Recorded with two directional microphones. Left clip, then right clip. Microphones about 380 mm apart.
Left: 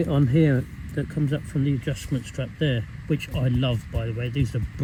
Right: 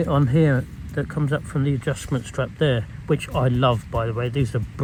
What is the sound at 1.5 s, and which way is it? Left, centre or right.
Speech, right.